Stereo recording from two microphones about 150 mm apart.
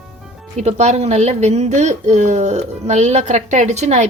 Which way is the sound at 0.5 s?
50° right (ahead or behind).